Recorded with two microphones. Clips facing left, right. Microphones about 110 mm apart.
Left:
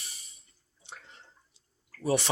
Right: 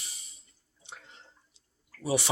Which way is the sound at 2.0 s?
10° right (ahead or behind).